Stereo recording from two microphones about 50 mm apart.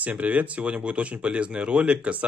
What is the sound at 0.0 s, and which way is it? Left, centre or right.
Speech, right.